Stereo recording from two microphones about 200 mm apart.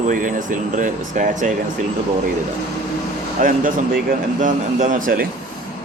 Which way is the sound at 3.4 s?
40° right (ahead or behind).